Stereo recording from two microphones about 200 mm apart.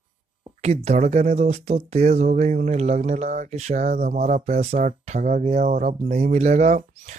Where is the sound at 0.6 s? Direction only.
35° right (ahead or behind).